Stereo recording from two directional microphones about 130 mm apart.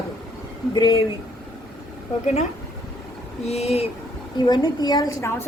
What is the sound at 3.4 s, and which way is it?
Speech, 55° left (ahead or behind).